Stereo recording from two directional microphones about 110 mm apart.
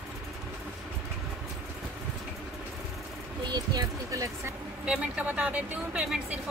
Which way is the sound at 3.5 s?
40° right (ahead or behind).